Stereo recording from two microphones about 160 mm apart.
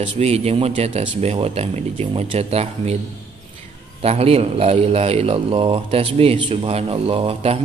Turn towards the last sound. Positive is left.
turn(degrees=-40)  # may be behind; listen again after turning